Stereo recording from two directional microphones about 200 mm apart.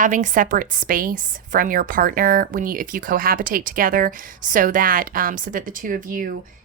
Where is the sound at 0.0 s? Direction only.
40° right (ahead or behind).